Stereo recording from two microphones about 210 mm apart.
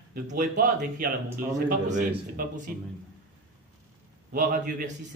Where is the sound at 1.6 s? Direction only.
40° right (ahead or behind).